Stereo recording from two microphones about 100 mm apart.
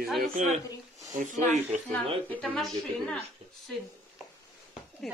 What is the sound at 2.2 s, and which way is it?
Speech, 10° left (ahead or behind).